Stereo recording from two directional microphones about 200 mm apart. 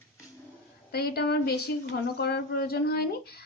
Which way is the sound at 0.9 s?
55° left (ahead or behind).